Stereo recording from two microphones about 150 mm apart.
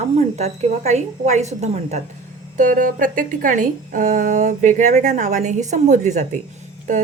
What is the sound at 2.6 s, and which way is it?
A woman's voice, 60° right (ahead or behind).